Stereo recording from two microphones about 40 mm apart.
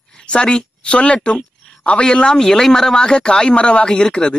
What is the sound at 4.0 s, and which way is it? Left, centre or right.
Speech, centre.